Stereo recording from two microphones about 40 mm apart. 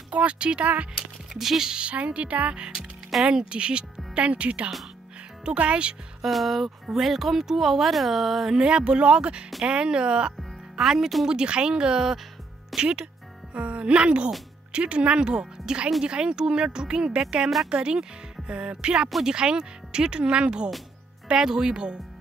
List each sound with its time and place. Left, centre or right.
0.1 s speech: right
1.3 s speech: centre
1.7 s speech: right
2.7 s music: centre
3.3 s speech: right
6.2 s speech: centre
8.5 s speech: right
10.8 s speech: centre
11.2 s speech: right
13.5 s speech: right